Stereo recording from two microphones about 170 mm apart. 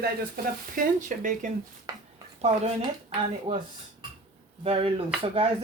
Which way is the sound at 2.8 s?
30° right (ahead or behind).